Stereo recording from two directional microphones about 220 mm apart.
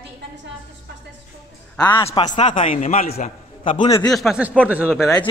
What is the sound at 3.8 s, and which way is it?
Speech, 25° left (ahead or behind).